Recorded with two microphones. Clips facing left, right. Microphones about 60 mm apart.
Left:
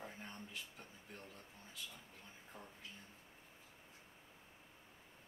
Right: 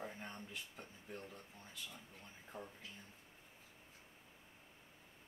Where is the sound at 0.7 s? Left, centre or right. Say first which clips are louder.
Right 4 dB; centre.